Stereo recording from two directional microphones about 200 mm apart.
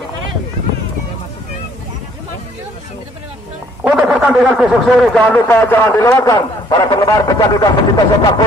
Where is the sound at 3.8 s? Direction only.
5° right (ahead or behind); by 7.7 s 20° left (ahead or behind).